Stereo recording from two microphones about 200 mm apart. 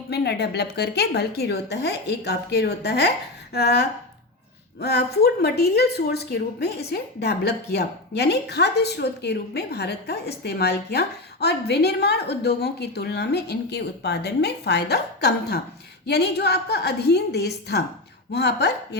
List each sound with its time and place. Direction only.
0.1 s a woman's voice: 55° left (ahead or behind)